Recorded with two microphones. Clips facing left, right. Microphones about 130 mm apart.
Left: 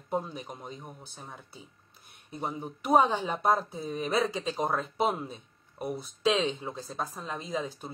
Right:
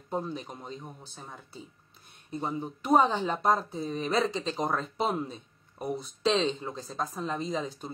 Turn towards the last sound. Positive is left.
turn(degrees=5)  # may be behind; listen again after turning